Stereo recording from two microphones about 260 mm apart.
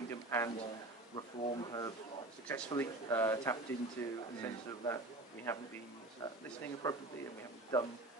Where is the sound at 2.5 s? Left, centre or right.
Centre.